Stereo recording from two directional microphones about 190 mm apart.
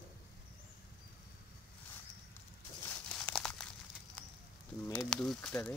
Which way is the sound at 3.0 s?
5° left (ahead or behind).